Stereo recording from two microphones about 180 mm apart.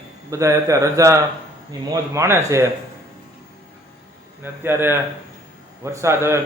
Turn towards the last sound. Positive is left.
turn(degrees=-15)  # may be behind; listen again after turning